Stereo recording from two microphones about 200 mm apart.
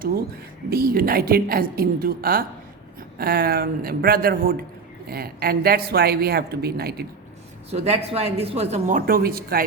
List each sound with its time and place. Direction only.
0.7 s a woman's voice: 50° right (ahead or behind)
7.7 s speech: 30° right (ahead or behind)
9.0 s a woman's voice: 45° right (ahead or behind)